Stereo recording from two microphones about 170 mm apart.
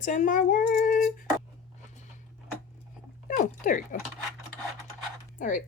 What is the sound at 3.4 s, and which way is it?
Speech, 50° left (ahead or behind).